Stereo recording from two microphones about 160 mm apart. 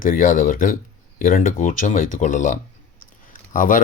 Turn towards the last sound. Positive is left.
turn(degrees=55)  # may be behind; listen again after turning